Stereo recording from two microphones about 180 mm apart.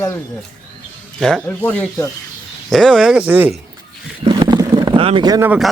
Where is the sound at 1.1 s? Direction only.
Centre (ahead or behind).